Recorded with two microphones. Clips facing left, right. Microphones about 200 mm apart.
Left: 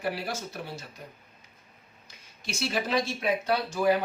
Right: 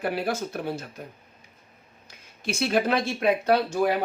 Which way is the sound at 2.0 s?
55° right (ahead or behind).